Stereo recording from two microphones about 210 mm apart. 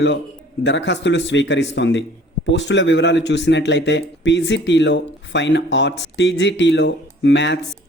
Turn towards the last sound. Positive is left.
turn(degrees=60)  # may be behind; listen again after turning